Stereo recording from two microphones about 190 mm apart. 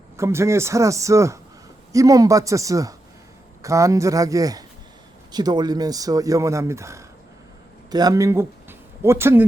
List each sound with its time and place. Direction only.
0.2 s speech: 15° right (ahead or behind)